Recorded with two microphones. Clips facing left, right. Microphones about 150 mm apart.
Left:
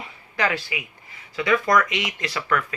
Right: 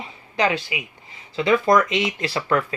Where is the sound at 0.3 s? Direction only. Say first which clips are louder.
Right 3 dB; 20° right (ahead or behind).